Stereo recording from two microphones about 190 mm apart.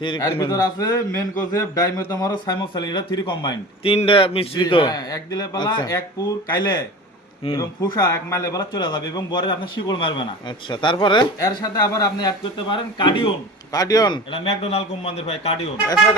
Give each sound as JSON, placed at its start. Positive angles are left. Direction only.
{"t": 0.0, "sound": "a man's voice", "side_deg": 25}